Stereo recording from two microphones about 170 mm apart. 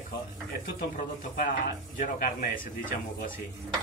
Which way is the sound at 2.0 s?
55° left (ahead or behind).